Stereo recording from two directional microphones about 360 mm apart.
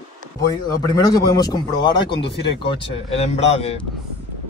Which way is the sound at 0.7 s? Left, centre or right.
Centre.